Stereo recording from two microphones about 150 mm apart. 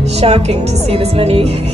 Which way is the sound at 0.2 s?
45° right (ahead or behind).